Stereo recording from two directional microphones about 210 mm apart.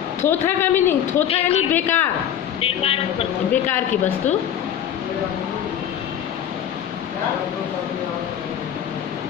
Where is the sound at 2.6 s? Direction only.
25° left (ahead or behind).